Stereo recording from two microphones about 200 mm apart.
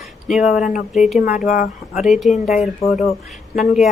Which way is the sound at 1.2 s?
40° left (ahead or behind).